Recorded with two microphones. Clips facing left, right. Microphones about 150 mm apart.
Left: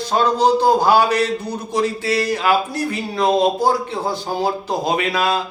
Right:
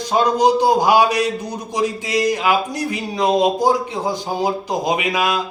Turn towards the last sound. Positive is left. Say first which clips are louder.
# even
turn(degrees=-15)  # may be behind; listen again after turning